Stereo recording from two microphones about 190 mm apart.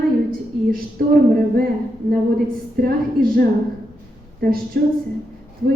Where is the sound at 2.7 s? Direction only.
50° right (ahead or behind).